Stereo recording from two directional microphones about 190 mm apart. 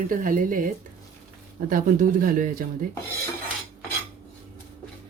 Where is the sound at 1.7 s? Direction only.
45° right (ahead or behind).